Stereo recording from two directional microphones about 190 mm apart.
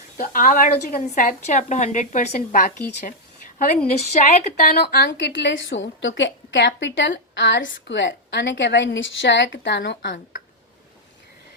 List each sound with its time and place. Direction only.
0.2 s a woman's voice: 45° left (ahead or behind)
4.8 s a woman's voice: 60° left (ahead or behind)